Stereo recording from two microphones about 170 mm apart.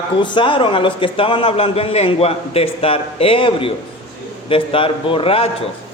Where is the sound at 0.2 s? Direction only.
30° left (ahead or behind).